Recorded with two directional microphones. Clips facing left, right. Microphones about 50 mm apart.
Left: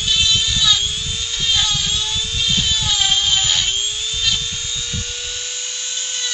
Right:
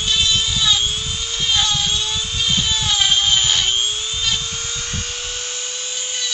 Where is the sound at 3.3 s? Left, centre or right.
Right.